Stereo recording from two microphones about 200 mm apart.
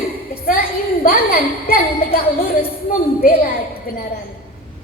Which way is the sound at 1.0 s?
50° left (ahead or behind).